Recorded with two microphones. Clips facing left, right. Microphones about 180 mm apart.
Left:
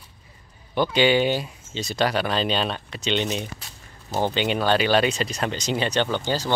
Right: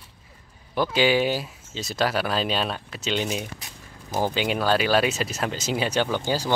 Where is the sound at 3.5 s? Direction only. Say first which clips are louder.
Right 2 dB; 15° right (ahead or behind).